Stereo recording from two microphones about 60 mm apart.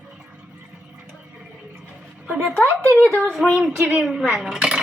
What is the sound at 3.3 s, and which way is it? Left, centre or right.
A woman's voice, centre.